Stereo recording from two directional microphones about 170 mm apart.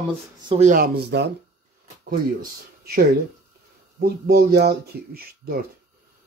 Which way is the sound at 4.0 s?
65° right (ahead or behind).